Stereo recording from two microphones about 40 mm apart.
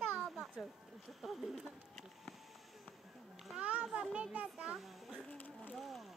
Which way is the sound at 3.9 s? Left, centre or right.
Right.